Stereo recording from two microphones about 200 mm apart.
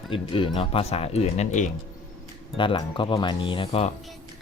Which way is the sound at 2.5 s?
25° left (ahead or behind).